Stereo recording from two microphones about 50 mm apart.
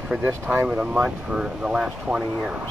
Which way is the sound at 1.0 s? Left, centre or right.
Centre.